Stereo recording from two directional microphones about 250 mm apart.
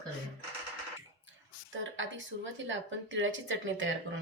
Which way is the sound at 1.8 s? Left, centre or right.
Right.